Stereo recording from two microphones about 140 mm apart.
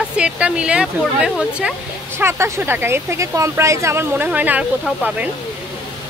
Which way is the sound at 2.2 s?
15° right (ahead or behind).